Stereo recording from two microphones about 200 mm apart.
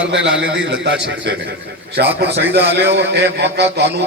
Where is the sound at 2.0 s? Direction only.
55° right (ahead or behind).